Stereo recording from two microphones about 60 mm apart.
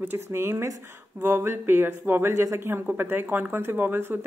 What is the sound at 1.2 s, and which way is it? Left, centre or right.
A woman's voice, right.